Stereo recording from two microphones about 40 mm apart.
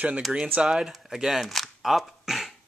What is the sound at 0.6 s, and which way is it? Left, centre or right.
Speech, centre.